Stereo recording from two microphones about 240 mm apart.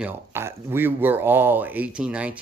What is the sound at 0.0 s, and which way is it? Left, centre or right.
Speech, centre.